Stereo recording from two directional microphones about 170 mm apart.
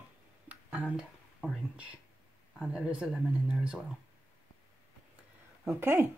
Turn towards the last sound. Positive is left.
turn(degrees=-15)  # may be behind; listen again after turning